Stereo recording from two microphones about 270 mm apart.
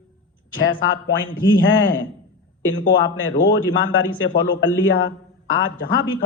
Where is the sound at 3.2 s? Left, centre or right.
Left.